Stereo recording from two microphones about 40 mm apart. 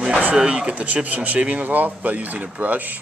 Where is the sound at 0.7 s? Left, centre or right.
Right.